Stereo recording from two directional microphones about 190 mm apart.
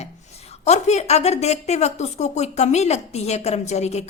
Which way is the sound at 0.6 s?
35° left (ahead or behind).